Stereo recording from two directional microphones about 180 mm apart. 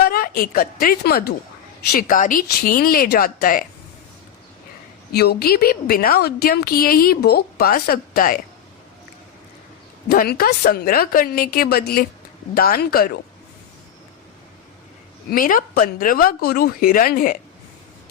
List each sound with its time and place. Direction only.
0.0 s a woman's voice: 55° left (ahead or behind)
5.1 s a woman's voice: 60° left (ahead or behind)
10.1 s a woman's voice: 55° left (ahead or behind)
15.3 s speech: 50° left (ahead or behind)